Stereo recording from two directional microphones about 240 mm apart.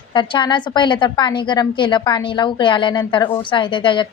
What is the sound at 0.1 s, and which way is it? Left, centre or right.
A woman's voice, centre.